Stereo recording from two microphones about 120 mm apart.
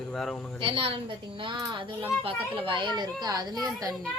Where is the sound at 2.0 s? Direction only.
50° right (ahead or behind).